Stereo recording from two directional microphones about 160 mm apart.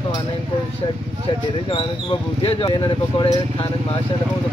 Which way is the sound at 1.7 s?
30° left (ahead or behind).